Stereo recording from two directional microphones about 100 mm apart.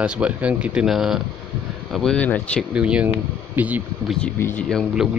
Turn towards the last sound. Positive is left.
turn(degrees=-5)  # may be behind; listen again after turning